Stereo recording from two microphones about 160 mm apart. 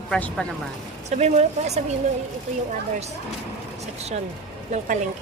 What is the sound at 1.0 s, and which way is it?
Speech, 45° right (ahead or behind).